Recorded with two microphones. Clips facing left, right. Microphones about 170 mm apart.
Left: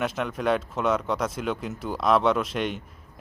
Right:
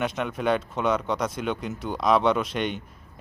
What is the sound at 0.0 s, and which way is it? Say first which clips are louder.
Speech: even; centre (ahead or behind).